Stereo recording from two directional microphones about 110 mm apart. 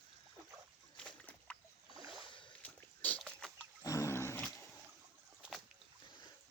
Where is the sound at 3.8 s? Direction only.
30° left (ahead or behind).